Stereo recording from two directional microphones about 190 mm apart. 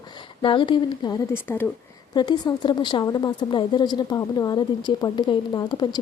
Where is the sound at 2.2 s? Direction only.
25° left (ahead or behind).